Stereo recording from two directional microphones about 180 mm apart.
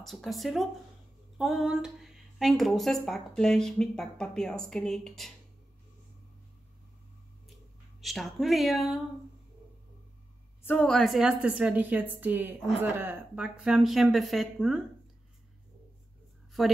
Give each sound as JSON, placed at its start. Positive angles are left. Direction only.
{"t": 0.0, "sound": "a woman's voice", "side_deg": 0}
{"t": 8.0, "sound": "a woman's voice", "side_deg": 0}
{"t": 10.6, "sound": "a woman's voice", "side_deg": 10}
{"t": 16.6, "sound": "a woman's voice", "side_deg": 0}